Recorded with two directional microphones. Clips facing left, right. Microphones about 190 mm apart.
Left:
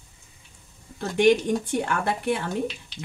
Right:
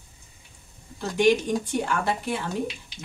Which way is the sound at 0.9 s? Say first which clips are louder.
Left 2 dB; 55° left (ahead or behind).